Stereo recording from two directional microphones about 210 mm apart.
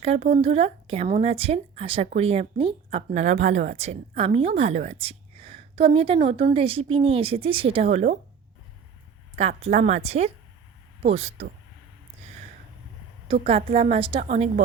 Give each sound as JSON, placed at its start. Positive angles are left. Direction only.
{"t": 0.0, "sound": "a woman's voice", "side_deg": -30}
{"t": 9.4, "sound": "a woman's voice", "side_deg": -30}
{"t": 13.3, "sound": "a woman's voice", "side_deg": -25}